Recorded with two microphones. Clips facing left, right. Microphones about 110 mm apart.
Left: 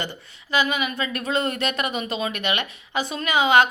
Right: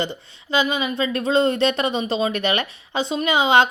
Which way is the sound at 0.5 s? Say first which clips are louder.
Right 2 dB; 25° right (ahead or behind).